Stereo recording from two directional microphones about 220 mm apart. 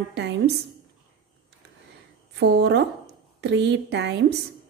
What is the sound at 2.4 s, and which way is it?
Speech, 50° right (ahead or behind).